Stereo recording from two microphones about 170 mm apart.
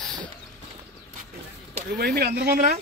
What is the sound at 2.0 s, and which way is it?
Speech, 75° right (ahead or behind).